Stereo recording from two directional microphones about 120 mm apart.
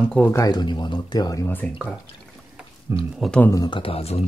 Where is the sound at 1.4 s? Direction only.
15° left (ahead or behind).